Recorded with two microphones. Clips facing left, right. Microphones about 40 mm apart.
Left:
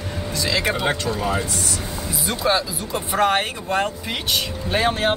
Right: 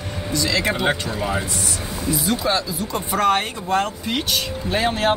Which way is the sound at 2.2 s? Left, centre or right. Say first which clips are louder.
Left 3 dB; centre.